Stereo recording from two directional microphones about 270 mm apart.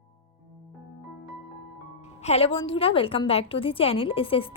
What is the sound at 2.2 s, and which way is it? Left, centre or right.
A woman's voice, left.